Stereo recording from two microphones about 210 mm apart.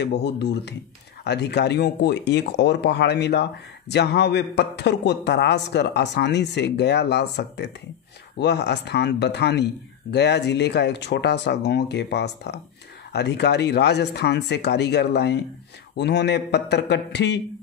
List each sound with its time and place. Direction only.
0.0 s a man's voice: 55° left (ahead or behind)